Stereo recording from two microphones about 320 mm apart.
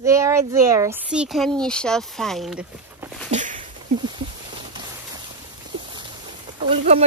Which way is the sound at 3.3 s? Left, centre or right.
Right.